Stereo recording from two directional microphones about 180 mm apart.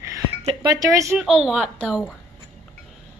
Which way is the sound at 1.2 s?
Centre (ahead or behind).